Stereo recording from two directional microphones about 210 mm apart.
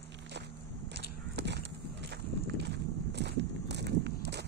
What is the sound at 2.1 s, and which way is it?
Walk, 55° right (ahead or behind).